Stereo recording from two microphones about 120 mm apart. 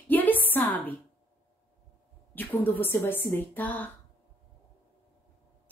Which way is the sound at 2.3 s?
15° left (ahead or behind).